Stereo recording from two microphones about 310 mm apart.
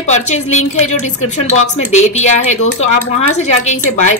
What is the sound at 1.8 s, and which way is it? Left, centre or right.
Speech, left.